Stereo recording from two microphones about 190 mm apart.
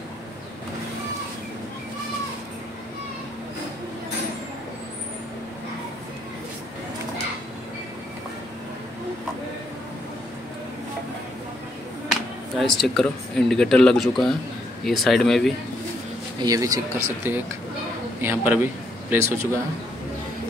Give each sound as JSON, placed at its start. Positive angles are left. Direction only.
{"t": 12.1, "sound": "speech", "side_deg": 0}
{"t": 16.3, "sound": "a man's voice", "side_deg": -20}